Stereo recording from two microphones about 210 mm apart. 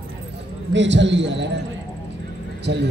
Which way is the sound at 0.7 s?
60° right (ahead or behind).